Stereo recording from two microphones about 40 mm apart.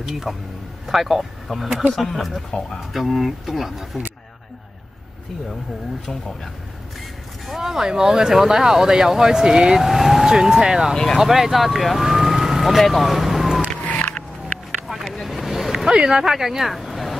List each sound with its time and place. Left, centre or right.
0.0 s speech: centre
7.4 s speech: centre
13.8 s a sound: left
15.2 s boat: centre
16.3 s speech: centre